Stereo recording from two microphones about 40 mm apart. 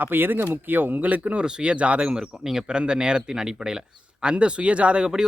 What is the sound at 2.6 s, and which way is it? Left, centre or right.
Speech, right.